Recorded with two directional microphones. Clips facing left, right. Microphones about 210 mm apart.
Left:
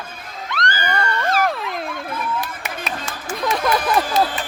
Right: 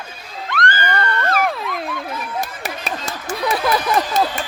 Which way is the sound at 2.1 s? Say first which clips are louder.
Left 2 dB; 50° left (ahead or behind).